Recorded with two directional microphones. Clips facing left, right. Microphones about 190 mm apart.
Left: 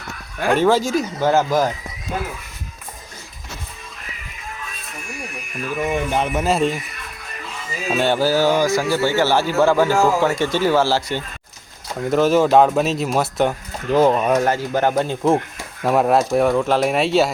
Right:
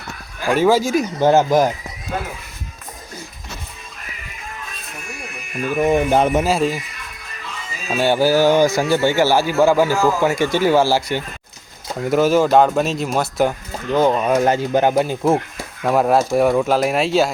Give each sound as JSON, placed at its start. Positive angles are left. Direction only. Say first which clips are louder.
{"t": 0.5, "sound": "speech", "louder": "right 1 dB", "side_deg": -10}
{"t": 1.2, "sound": "speech", "louder": "right 4 dB", "side_deg": -20}
{"t": 5.8, "sound": "speech", "louder": "right 6 dB", "side_deg": -35}
{"t": 6.4, "sound": "speech", "louder": "even", "side_deg": -5}
{"t": 7.9, "sound": "speech", "louder": "right 2 dB", "side_deg": -10}
{"t": 14.4, "sound": "speech", "louder": "right 3 dB", "side_deg": -20}